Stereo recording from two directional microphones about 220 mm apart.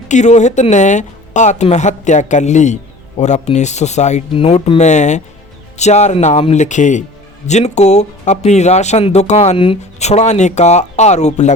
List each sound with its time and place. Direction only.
0.1 s speech: 30° left (ahead or behind)